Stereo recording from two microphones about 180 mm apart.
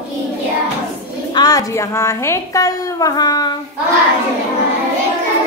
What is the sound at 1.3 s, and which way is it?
A woman's voice, 20° left (ahead or behind).